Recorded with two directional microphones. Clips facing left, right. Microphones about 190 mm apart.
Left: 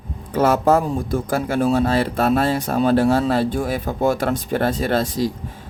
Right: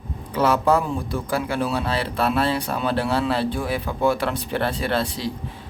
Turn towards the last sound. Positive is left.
turn(degrees=45)  # may be behind; listen again after turning